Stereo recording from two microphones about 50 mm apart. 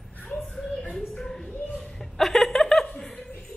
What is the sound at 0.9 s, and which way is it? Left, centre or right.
Chuckle, centre.